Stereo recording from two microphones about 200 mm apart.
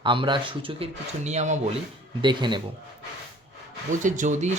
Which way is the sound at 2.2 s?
25° right (ahead or behind).